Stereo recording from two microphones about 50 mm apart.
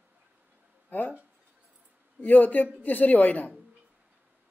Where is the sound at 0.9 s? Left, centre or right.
Left.